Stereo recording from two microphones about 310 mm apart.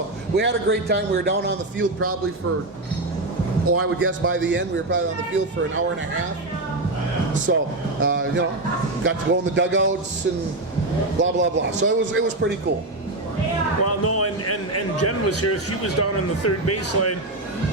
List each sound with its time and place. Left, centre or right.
0.3 s a man's voice: right
3.7 s a man's voice: right
7.5 s a man's voice: right
11.2 s a man's voice: right
13.8 s a sound: left
15.4 s speech: left